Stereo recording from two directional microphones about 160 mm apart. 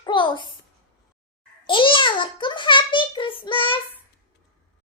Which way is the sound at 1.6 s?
30° left (ahead or behind).